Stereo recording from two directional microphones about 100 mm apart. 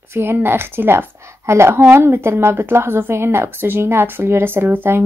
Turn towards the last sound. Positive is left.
turn(degrees=-20)  # may be behind; listen again after turning